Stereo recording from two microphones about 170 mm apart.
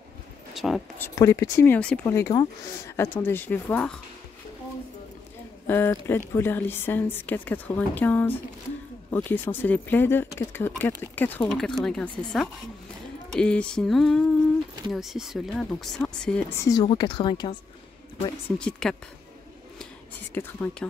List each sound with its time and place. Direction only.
0.6 s speech: centre (ahead or behind)
0.9 s a woman's voice: 15° left (ahead or behind)
5.7 s speech: 15° left (ahead or behind)
16.5 s a woman's voice: 20° left (ahead or behind)
18.6 s speech: 5° left (ahead or behind)
19.8 s a sound: 10° left (ahead or behind)